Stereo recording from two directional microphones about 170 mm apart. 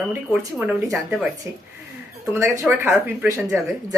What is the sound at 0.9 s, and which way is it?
Speech, centre (ahead or behind).